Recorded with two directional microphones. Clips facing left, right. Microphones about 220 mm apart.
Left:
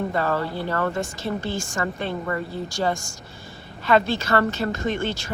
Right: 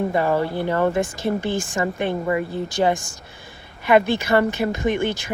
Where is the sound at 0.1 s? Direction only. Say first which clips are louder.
Right 4 dB; 15° right (ahead or behind).